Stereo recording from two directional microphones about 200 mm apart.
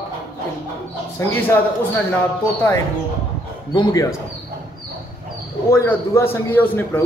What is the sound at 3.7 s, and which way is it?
Speech, 15° left (ahead or behind).